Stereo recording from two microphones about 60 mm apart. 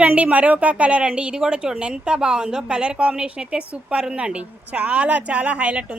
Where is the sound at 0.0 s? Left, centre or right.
Right.